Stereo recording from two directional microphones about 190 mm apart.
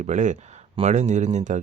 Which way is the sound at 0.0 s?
40° right (ahead or behind).